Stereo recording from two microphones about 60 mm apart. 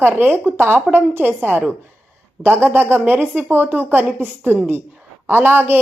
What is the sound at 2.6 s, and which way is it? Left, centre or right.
Speech, right.